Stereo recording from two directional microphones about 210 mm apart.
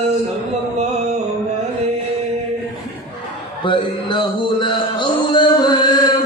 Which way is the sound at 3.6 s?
25° left (ahead or behind).